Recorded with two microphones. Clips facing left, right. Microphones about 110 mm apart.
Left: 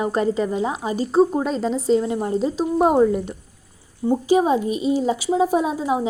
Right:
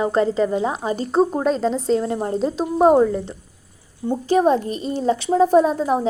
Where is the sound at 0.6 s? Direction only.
Centre (ahead or behind).